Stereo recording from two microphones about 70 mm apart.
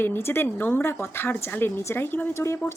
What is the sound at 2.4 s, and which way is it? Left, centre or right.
Speech, left.